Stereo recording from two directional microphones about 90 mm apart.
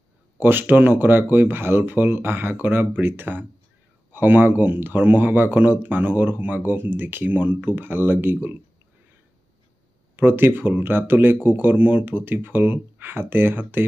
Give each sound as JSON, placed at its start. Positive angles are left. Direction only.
{"t": 0.4, "sound": "speech", "side_deg": -20}
{"t": 10.1, "sound": "speech", "side_deg": -20}